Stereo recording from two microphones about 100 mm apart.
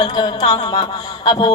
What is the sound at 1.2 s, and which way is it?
Speech, 45° left (ahead or behind).